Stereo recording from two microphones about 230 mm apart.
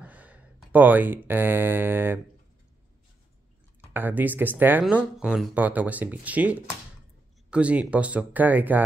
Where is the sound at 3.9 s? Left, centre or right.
Centre.